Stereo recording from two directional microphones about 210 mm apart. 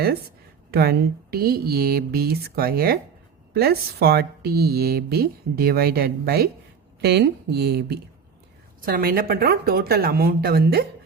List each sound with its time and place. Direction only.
0.7 s speech: 45° right (ahead or behind)